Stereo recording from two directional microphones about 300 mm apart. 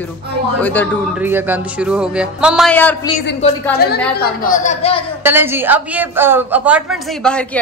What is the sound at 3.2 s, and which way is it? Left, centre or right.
A woman's voice, left.